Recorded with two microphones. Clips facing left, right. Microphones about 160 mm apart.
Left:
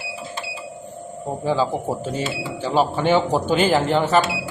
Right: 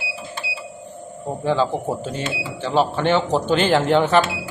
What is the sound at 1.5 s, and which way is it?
Speech, 10° left (ahead or behind).